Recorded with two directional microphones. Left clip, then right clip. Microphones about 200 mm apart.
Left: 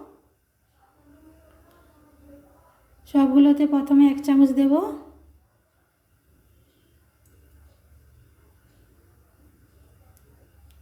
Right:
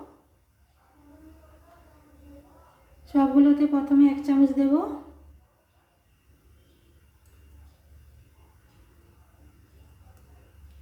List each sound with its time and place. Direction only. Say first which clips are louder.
3.0 s a woman's voice: left 2 dB; 50° left (ahead or behind)